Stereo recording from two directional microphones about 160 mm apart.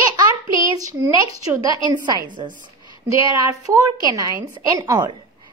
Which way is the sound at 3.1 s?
20° right (ahead or behind).